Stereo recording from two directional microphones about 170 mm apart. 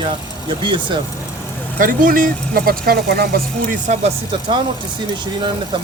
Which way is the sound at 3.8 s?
40° right (ahead or behind).